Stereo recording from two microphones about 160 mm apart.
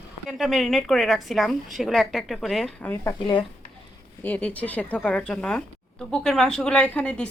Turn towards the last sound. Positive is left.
turn(degrees=5)  # may be behind; listen again after turning